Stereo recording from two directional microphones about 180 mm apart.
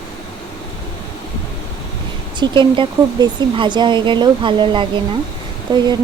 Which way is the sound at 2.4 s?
25° right (ahead or behind).